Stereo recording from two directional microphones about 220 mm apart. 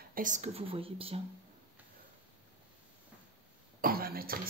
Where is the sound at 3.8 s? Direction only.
40° right (ahead or behind).